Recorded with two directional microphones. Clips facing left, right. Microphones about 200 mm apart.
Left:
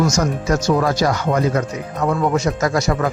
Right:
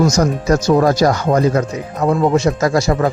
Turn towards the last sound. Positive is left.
turn(degrees=-35)  # may be behind; listen again after turning